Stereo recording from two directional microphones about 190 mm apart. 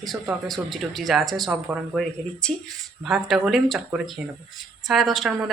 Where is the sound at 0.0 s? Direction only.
Centre (ahead or behind).